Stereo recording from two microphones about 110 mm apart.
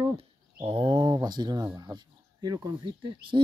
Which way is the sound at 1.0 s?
35° right (ahead or behind).